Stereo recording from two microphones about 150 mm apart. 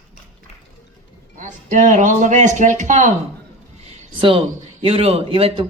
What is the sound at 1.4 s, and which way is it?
Speech, 60° right (ahead or behind).